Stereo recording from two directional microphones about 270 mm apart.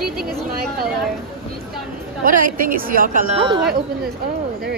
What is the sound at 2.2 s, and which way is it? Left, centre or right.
A woman's voice, right.